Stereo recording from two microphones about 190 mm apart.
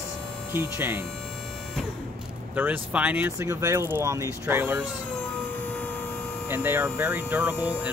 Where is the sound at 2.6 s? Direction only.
5° right (ahead or behind).